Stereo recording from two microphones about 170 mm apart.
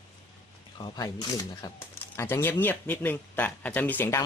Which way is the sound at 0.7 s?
25° left (ahead or behind).